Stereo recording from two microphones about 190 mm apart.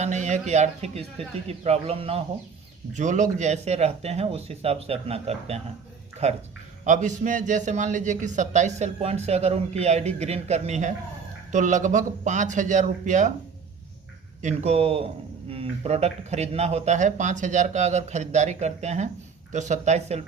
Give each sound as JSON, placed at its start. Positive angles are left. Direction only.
{"t": 0.0, "sound": "speech", "side_deg": -40}
{"t": 14.4, "sound": "speech", "side_deg": -35}